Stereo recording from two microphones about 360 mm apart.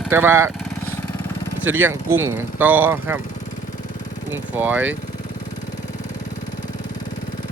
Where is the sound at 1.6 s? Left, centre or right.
Centre.